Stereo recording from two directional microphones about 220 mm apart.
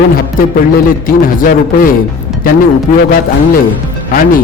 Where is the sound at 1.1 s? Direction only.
40° left (ahead or behind).